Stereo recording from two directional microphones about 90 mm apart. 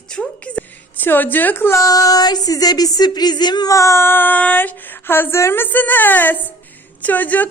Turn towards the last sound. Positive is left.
turn(degrees=20)  # may be behind; listen again after turning